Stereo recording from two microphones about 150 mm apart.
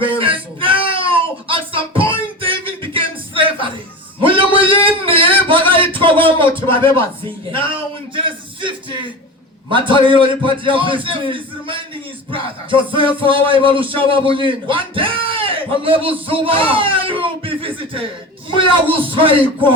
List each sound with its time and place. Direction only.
0.0 s a sound: 35° right (ahead or behind)
8.1 s music: 35° right (ahead or behind)
9.6 s a man's voice: 35° right (ahead or behind)
12.9 s a man's voice: 35° right (ahead or behind)